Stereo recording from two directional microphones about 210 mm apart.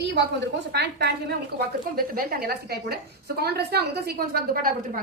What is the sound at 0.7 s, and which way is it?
A woman's voice, 50° right (ahead or behind).